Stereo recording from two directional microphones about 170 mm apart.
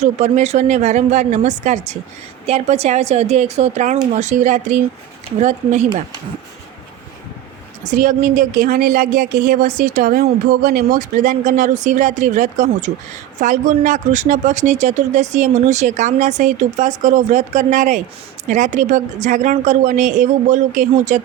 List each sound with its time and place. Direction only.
0.0 s a woman's voice: 40° right (ahead or behind)
7.9 s speech: 50° right (ahead or behind)